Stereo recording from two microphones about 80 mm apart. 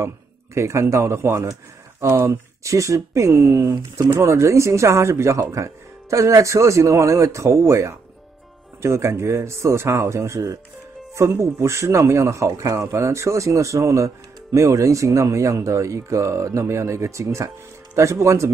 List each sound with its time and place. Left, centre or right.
0.6 s speech: right